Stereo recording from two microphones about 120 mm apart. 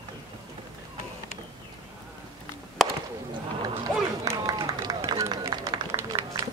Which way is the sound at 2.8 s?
Centre (ahead or behind).